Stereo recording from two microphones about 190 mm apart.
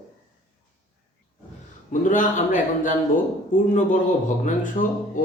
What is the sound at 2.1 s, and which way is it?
Speech, 45° left (ahead or behind).